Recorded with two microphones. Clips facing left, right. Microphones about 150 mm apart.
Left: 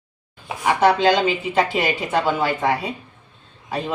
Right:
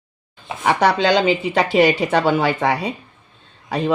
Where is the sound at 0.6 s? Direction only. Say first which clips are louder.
Even; 80° right.